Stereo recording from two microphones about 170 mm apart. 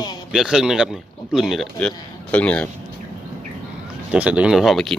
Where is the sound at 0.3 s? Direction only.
5° right (ahead or behind).